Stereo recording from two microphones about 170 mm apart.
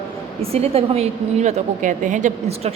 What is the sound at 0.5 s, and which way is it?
A woman's voice, 35° right (ahead or behind).